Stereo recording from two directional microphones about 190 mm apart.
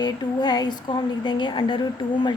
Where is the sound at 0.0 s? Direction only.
25° left (ahead or behind).